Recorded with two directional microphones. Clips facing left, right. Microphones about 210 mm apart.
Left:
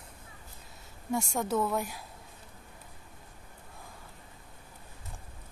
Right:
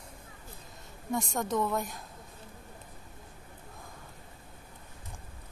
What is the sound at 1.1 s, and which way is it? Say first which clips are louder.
Speech: left 1 dB; 10° left (ahead or behind).